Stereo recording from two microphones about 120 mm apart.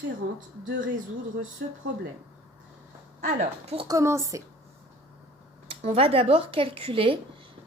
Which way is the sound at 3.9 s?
25° right (ahead or behind).